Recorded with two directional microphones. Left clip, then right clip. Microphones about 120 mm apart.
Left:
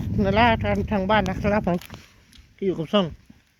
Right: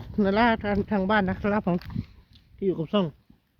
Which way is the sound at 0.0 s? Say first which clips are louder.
Left 3 dB; 20° right (ahead or behind).